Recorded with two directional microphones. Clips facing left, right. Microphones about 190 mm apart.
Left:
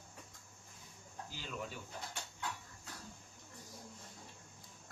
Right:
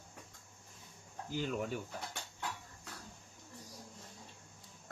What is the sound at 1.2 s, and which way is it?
Speech, 55° right (ahead or behind).